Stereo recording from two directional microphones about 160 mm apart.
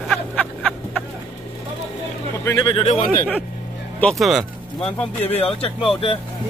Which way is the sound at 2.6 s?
35° left (ahead or behind).